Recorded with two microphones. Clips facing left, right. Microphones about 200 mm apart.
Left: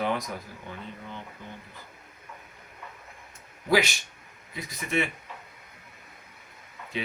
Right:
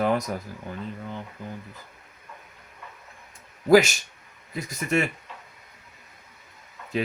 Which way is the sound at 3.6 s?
45° right (ahead or behind).